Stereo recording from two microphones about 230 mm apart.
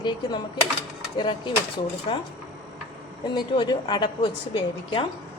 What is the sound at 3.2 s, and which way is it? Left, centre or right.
A woman's voice, centre.